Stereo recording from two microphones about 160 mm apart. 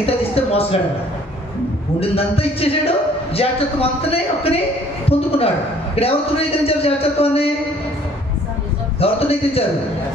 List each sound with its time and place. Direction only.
0.0 s a man's voice: 35° left (ahead or behind)
2.0 s a man's voice: 35° left (ahead or behind)
9.0 s a man's voice: 40° left (ahead or behind)